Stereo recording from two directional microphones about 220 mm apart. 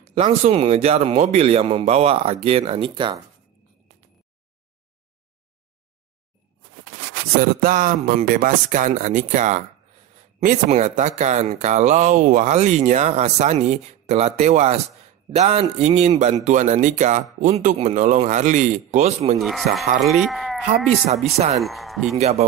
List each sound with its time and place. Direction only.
0.0 s speech: 30° right (ahead or behind)
7.6 s speech: 40° right (ahead or behind)
19.3 s speech: centre (ahead or behind)